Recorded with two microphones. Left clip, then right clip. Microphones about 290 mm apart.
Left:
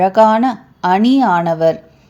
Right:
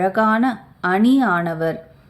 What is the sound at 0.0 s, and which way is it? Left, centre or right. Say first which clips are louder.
A woman's voice: left 7 dB; centre.